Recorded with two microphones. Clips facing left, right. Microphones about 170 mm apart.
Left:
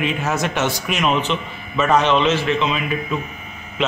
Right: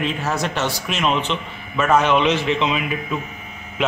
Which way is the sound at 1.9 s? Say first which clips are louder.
Even; 10° right (ahead or behind).